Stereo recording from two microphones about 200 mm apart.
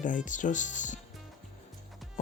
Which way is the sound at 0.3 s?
40° left (ahead or behind).